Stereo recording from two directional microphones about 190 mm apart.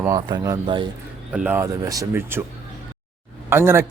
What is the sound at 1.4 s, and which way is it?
Speech, 10° right (ahead or behind).